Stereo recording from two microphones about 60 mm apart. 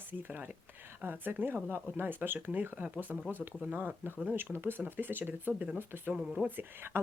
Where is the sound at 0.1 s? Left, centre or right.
Right.